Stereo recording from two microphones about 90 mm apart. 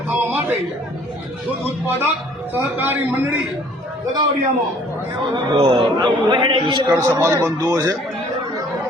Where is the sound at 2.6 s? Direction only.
25° right (ahead or behind).